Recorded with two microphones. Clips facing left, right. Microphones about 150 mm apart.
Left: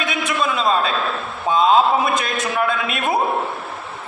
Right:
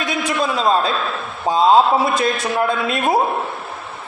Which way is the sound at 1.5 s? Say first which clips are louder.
Right 2 dB; 35° right (ahead or behind).